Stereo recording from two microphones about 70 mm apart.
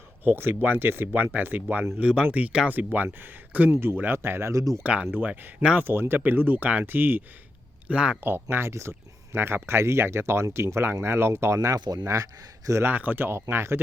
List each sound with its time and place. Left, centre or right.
0.3 s speech: right
2.0 s speech: centre; by 4.5 s right
4.5 s a man's voice: right
4.8 s speech: centre
7.9 s speech: centre
8.2 s a man's voice: right
12.8 s speech: right